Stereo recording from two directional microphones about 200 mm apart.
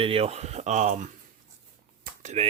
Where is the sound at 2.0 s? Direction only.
35° right (ahead or behind).